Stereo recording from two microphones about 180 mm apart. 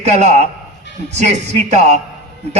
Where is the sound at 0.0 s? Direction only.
40° right (ahead or behind).